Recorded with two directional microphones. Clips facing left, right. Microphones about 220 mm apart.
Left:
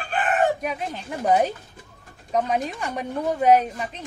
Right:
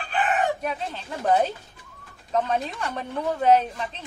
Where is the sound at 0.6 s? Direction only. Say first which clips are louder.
Left 1 dB; 10° left (ahead or behind).